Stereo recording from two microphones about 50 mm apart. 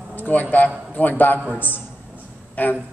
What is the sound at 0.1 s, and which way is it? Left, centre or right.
A man's voice, left.